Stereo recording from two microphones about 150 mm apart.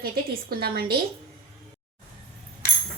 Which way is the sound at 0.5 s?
85° right.